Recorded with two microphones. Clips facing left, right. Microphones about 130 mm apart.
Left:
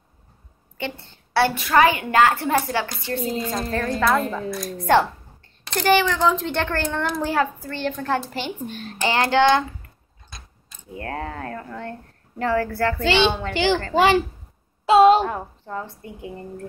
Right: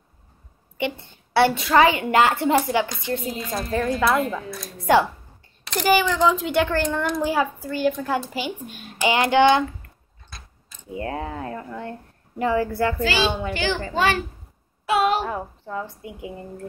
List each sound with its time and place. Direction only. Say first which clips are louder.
0.7 s a woman's voice: right 4 dB; 15° right (ahead or behind)
5.6 s speech: left 1 dB; 5° right (ahead or behind)
10.9 s speech: right 2 dB; 15° right (ahead or behind)
13.0 s speech: left 3 dB; 25° left (ahead or behind)
15.7 s speech: even; 10° right (ahead or behind)